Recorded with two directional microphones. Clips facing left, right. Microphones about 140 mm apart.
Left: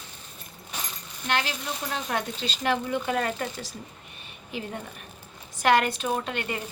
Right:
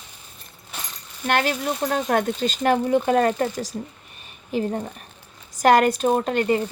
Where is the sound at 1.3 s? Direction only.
50° right (ahead or behind).